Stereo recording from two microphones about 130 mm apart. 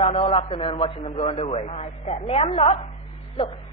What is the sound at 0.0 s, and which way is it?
Speech, 45° left (ahead or behind).